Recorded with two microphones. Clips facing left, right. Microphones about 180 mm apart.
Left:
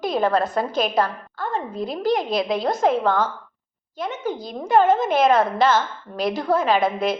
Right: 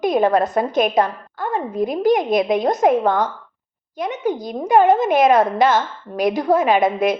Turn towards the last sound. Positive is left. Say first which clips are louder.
# right 4 dB
turn(degrees=-20)  # may be behind; listen again after turning